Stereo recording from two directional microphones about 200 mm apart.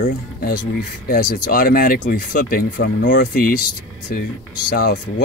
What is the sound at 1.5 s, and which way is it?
Speech, 45° left (ahead or behind).